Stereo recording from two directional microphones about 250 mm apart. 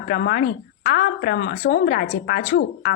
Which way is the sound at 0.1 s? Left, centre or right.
Left.